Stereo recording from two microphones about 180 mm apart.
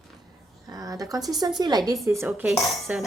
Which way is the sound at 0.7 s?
20° right (ahead or behind).